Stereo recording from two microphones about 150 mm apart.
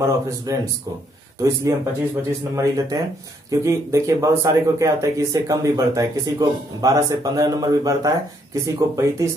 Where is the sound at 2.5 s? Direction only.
20° right (ahead or behind).